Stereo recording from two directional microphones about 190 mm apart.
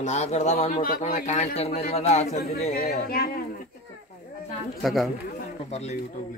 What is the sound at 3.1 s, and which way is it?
Speech, 50° left (ahead or behind).